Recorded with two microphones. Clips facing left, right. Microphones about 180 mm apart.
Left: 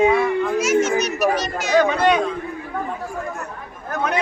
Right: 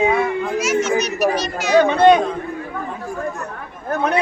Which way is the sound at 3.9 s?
30° right (ahead or behind).